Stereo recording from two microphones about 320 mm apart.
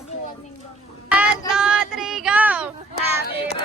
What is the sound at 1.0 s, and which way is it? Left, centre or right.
Child singing, centre.